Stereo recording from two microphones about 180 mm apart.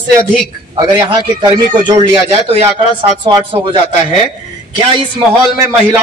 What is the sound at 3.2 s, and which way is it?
Speech, 25° right (ahead or behind).